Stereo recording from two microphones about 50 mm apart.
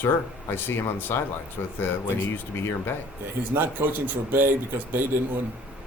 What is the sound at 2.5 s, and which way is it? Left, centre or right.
Speech, left.